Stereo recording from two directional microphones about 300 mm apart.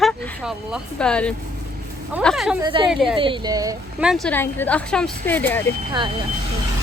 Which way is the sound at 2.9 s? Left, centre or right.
Centre.